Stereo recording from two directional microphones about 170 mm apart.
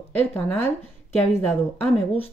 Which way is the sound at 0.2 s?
10° left (ahead or behind).